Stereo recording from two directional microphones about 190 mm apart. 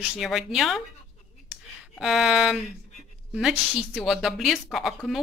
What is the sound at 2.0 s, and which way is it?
A woman's voice, centre (ahead or behind).